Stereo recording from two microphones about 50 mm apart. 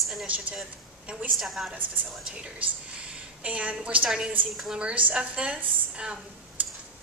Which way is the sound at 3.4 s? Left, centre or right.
Right.